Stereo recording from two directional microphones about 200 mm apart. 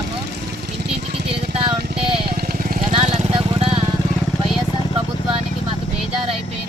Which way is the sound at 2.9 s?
30° right (ahead or behind).